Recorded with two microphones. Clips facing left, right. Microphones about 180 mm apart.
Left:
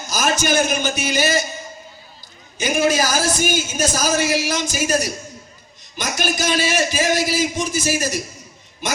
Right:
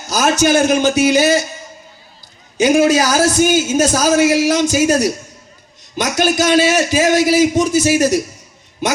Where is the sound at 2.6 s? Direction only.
70° right (ahead or behind).